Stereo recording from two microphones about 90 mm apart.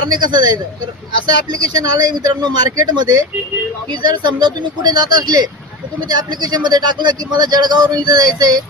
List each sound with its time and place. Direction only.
0.0 s speech: 60° right (ahead or behind)